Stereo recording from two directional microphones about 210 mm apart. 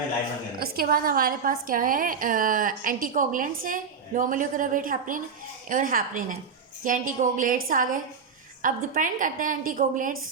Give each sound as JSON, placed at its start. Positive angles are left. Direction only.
{"t": 0.6, "sound": "a woman's voice", "side_deg": -45}